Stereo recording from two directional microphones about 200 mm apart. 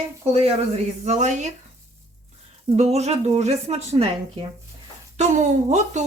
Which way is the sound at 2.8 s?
30° right (ahead or behind).